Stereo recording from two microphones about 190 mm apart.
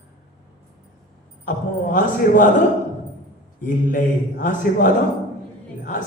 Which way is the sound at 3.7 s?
45° left (ahead or behind).